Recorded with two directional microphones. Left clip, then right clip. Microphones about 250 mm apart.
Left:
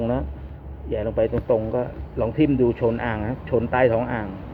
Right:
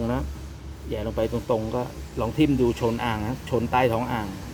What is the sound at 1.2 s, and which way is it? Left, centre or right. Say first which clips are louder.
Speech: left 4 dB; right.